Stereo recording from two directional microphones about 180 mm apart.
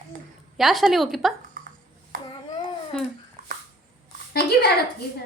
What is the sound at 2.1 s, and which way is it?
Babbling, 50° right (ahead or behind).